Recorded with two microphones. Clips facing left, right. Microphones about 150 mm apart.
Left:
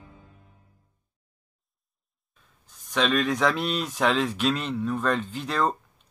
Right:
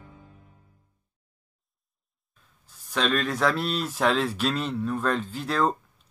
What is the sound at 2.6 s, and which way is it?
Speech, centre (ahead or behind).